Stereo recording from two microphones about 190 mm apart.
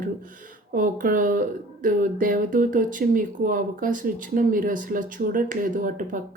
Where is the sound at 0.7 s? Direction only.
45° right (ahead or behind).